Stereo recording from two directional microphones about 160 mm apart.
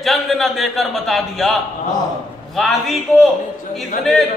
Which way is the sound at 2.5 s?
Centre (ahead or behind).